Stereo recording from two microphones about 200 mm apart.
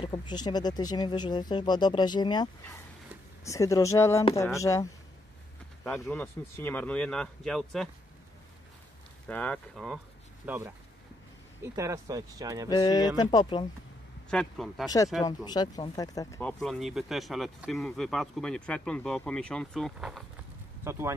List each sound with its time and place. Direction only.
0.0 s speech: 25° left (ahead or behind)
5.9 s speech: 10° left (ahead or behind)
9.3 s speech: 5° left (ahead or behind)
10.4 s speech: 10° right (ahead or behind)
12.6 s speech: 20° left (ahead or behind)
14.3 s speech: centre (ahead or behind)
15.2 s speech: 20° left (ahead or behind)
16.4 s speech: centre (ahead or behind)
20.8 s speech: 15° right (ahead or behind)